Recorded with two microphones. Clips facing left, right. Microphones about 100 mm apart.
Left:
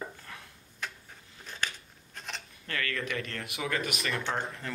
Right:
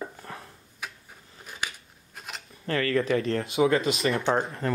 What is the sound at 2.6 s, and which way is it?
Speech, 30° right (ahead or behind).